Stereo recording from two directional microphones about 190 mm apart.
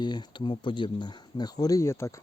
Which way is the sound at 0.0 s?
25° left (ahead or behind).